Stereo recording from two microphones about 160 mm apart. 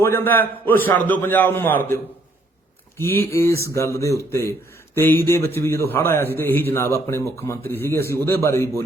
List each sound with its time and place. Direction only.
0.0 s a man's voice: 15° left (ahead or behind)
3.0 s a man's voice: 15° left (ahead or behind)